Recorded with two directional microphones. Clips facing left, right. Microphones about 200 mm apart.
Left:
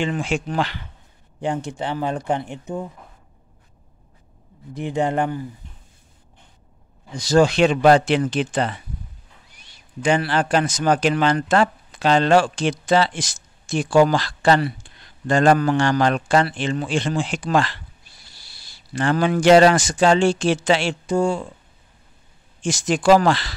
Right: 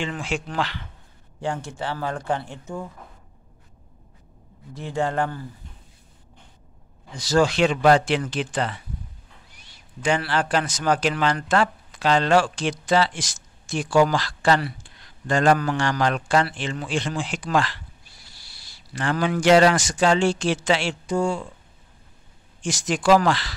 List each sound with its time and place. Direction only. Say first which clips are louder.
0.0 s a man's voice: left 5 dB; 20° left (ahead or behind)
4.7 s a man's voice: left 3 dB; 20° left (ahead or behind)
7.2 s speech: left 4 dB; 20° left (ahead or behind)
10.0 s speech: left 3 dB; 20° left (ahead or behind)
18.9 s speech: left 4 dB; 30° left (ahead or behind)
22.6 s speech: left 4 dB; 25° left (ahead or behind)